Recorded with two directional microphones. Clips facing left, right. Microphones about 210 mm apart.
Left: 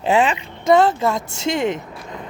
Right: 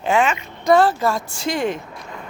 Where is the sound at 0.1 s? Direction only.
35° left (ahead or behind).